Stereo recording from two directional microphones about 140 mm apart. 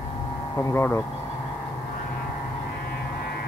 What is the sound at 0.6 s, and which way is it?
Speech, 20° left (ahead or behind).